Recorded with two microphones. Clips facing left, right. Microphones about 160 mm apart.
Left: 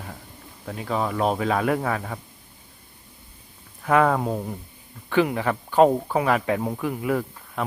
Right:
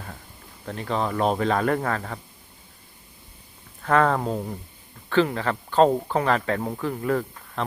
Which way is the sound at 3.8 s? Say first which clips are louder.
Left 1 dB; 10° left (ahead or behind).